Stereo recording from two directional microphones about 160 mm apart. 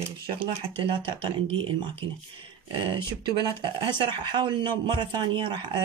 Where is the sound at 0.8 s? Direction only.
30° right (ahead or behind).